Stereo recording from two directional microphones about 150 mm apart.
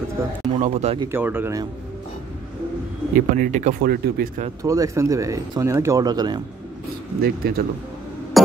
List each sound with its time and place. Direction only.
0.6 s speech: 50° right (ahead or behind)
1.1 s speech: 15° right (ahead or behind)
3.2 s speech: 60° right (ahead or behind); by 4.3 s 90° right
4.6 s speech: 20° right (ahead or behind)
7.2 s speech: 90° right